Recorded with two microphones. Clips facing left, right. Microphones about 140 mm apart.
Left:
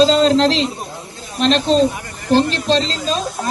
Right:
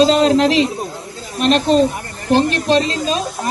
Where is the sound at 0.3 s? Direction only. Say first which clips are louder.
Even; 10° right (ahead or behind).